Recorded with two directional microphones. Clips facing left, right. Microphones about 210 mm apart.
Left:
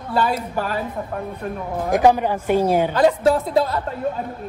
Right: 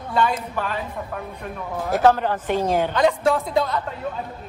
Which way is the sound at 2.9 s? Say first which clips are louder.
Left 3 dB; 30° left (ahead or behind).